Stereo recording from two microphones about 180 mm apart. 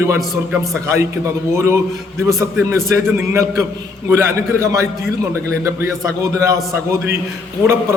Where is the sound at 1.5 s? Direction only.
15° right (ahead or behind).